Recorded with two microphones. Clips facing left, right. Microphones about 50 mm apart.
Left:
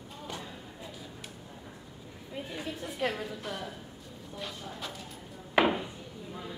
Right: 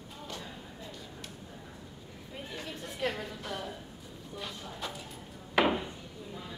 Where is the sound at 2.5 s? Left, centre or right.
Centre.